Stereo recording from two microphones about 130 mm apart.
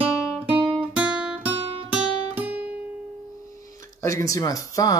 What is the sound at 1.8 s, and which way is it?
Guitar, 10° right (ahead or behind).